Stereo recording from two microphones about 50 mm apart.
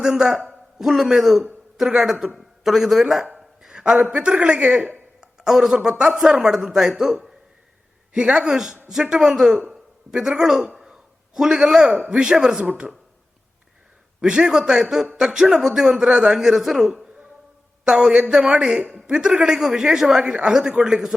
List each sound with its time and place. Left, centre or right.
0.0 s a man's voice: centre
2.3 s a man's voice: centre
3.3 s a sound: centre
4.1 s a woman's voice: right
10.8 s a sound: centre
12.0 s speech: centre
14.2 s speech: centre